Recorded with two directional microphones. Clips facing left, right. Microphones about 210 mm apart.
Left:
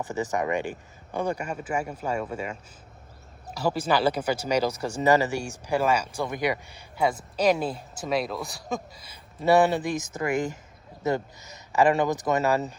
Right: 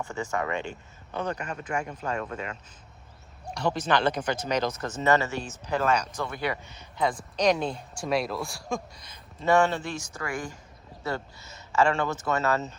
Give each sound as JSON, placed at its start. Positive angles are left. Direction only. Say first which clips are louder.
{"t": 0.0, "sound": "speech", "louder": "left 3 dB", "side_deg": 15}